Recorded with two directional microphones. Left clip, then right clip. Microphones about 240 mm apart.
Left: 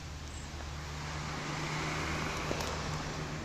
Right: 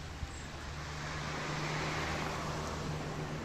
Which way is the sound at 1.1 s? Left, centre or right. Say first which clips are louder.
Even; left.